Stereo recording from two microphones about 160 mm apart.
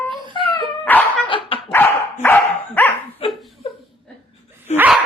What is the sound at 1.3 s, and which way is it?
Dog, 35° left (ahead or behind).